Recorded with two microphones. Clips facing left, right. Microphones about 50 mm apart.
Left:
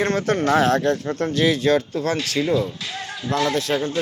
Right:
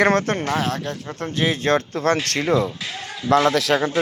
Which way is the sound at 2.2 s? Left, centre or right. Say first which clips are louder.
Right 1 dB; right.